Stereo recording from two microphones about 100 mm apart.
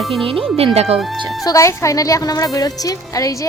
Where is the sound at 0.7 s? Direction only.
90° right.